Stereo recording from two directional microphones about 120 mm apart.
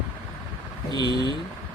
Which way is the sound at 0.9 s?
35° left (ahead or behind).